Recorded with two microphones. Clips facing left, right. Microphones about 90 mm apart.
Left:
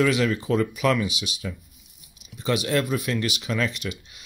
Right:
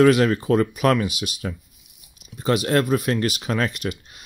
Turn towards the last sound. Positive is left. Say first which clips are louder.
# right 4 dB
turn(degrees=-45)  # may be behind; listen again after turning